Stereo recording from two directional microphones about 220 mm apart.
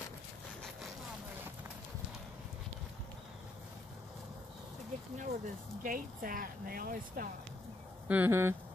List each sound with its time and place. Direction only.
5.1 s speech: 35° right (ahead or behind)
8.1 s speech: 10° right (ahead or behind)